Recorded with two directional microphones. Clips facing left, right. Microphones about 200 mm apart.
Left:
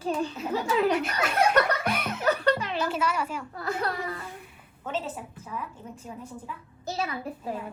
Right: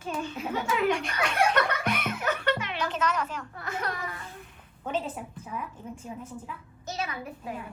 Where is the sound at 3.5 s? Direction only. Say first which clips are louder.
Left 4 dB; 35° left (ahead or behind).